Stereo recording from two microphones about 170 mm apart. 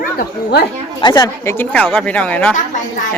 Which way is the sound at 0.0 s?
55° left (ahead or behind).